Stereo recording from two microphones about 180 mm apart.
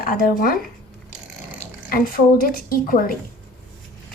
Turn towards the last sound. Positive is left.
turn(degrees=50)  # may be behind; listen again after turning